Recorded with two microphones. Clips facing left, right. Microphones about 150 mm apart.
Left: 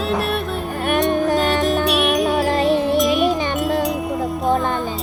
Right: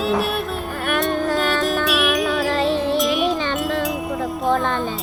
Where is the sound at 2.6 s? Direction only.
15° left (ahead or behind).